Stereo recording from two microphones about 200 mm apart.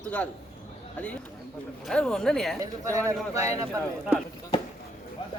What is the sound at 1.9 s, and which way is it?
Speech, centre (ahead or behind).